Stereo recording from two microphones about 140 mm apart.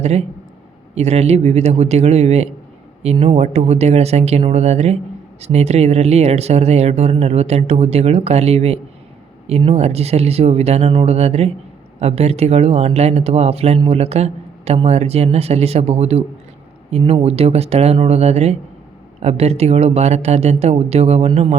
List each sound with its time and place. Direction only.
0.0 s speech: 50° right (ahead or behind)